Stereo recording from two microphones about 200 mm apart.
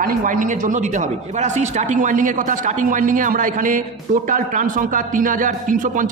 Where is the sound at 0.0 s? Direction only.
40° right (ahead or behind).